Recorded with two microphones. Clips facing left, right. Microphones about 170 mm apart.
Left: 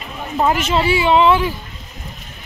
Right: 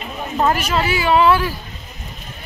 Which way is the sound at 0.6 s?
25° left (ahead or behind).